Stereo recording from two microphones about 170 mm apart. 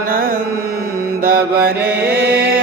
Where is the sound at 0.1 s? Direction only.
55° right (ahead or behind).